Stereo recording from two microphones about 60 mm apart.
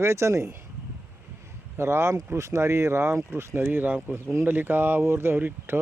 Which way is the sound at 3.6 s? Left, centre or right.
Right.